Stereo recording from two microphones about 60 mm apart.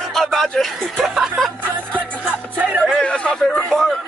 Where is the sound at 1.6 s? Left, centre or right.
Right.